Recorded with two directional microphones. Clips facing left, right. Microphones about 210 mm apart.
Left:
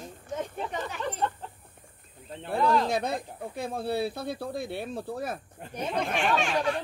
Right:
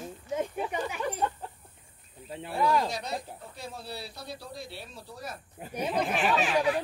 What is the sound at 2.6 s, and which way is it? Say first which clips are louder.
Speech: left 2 dB; 10° right (ahead or behind).